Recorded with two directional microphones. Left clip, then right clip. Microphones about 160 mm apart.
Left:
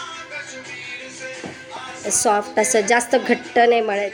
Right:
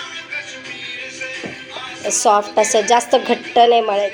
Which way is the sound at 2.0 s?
20° left (ahead or behind).